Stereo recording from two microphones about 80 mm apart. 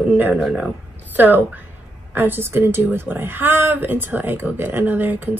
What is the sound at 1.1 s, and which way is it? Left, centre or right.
A woman's voice, right.